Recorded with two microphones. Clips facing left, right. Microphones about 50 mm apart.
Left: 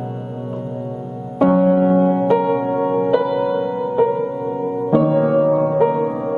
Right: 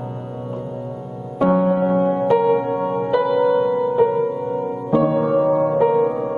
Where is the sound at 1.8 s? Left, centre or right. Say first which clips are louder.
Left 3 dB; left.